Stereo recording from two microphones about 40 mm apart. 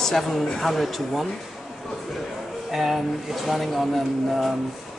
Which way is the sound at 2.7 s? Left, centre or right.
Centre.